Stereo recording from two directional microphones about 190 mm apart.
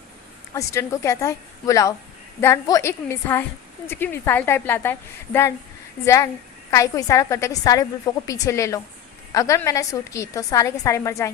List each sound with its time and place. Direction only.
0.5 s a woman's voice: 15° left (ahead or behind)
6.7 s a woman's voice: 15° left (ahead or behind)